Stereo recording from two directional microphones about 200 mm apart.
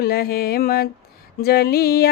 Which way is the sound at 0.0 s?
50° left (ahead or behind).